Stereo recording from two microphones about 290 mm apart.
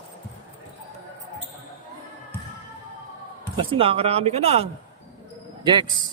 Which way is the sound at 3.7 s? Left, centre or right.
Centre.